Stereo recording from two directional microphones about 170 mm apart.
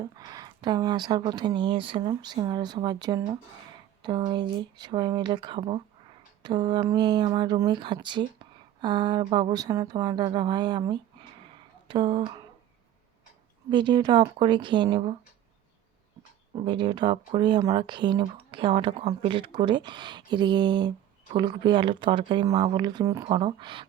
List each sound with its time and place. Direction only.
0.0 s speech: 25° right (ahead or behind)
13.7 s speech: 25° right (ahead or behind)
16.6 s speech: 25° right (ahead or behind)